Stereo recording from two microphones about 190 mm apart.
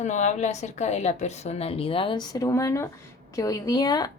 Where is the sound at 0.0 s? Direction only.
40° left (ahead or behind).